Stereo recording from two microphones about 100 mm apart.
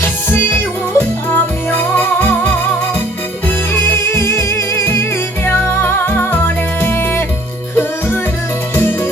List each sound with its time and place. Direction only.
0.0 s music: 20° left (ahead or behind)
3.7 s music: 20° left (ahead or behind)
8.7 s music: 25° left (ahead or behind)